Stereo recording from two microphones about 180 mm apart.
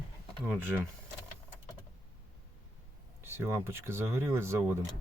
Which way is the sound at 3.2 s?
15° right (ahead or behind).